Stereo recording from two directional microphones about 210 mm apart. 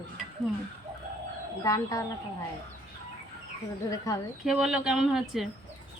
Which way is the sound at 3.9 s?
15° left (ahead or behind).